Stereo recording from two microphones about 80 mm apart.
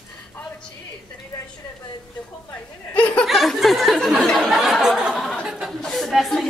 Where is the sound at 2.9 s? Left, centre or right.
Left.